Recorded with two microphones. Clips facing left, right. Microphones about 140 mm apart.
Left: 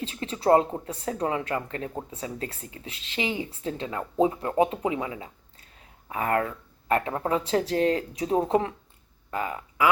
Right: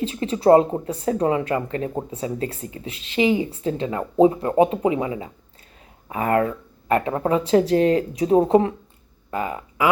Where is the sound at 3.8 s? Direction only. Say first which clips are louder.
Right 7 dB; 20° right (ahead or behind).